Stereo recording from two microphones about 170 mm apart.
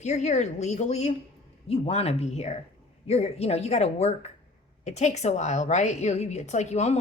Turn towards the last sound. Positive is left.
turn(degrees=40)  # may be behind; listen again after turning